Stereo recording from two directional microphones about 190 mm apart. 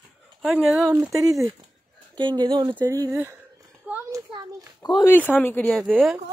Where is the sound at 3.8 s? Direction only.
10° right (ahead or behind).